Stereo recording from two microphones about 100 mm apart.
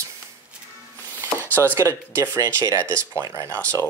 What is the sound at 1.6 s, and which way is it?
Speech, 25° right (ahead or behind).